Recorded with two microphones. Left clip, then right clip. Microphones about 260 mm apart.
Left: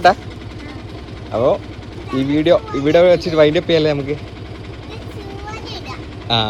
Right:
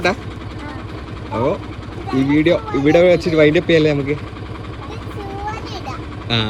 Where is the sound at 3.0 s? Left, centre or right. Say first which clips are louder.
Left 2 dB; right.